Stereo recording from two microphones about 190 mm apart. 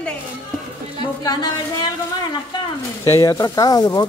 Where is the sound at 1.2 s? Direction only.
20° left (ahead or behind).